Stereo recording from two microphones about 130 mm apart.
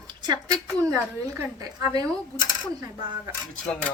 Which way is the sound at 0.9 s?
20° right (ahead or behind).